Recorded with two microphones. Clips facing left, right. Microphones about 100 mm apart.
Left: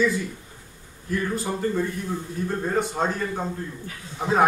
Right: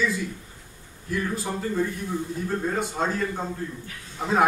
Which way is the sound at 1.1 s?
Centre (ahead or behind).